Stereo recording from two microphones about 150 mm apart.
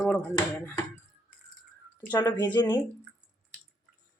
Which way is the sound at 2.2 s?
25° left (ahead or behind).